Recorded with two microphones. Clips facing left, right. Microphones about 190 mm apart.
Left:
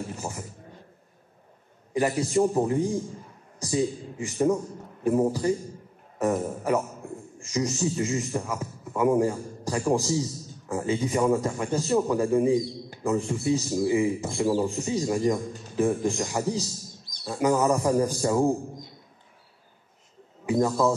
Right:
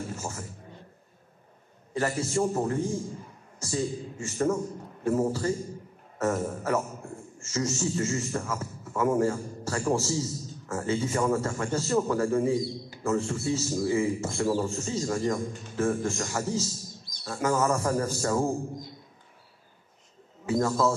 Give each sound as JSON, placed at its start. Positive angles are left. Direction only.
{"t": 0.1, "sound": "a man's voice", "side_deg": 15}
{"t": 2.0, "sound": "a man's voice", "side_deg": 15}
{"t": 20.4, "sound": "a man's voice", "side_deg": 15}